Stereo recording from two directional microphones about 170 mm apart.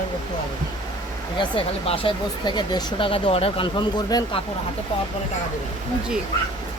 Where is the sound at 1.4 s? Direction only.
30° left (ahead or behind).